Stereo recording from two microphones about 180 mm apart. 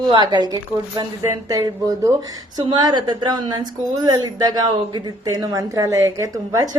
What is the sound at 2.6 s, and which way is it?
A woman's voice, 25° right (ahead or behind).